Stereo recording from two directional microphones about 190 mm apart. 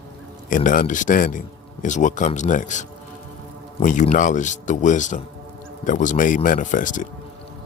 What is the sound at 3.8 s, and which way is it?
Speech, 40° left (ahead or behind).